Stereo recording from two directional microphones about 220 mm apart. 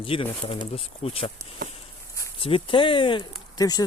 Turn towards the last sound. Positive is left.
turn(degrees=15)  # may be behind; listen again after turning